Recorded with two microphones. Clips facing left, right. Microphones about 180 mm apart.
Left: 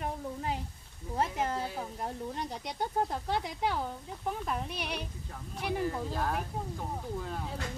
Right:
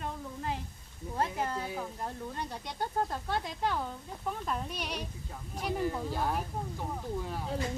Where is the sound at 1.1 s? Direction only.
20° left (ahead or behind); by 5.9 s centre (ahead or behind).